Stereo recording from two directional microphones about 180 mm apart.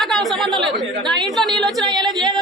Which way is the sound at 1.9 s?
25° right (ahead or behind).